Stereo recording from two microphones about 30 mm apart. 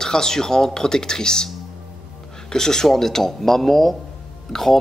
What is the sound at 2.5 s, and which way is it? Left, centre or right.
Speech, centre.